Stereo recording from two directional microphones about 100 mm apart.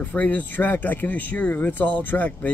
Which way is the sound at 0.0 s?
15° left (ahead or behind).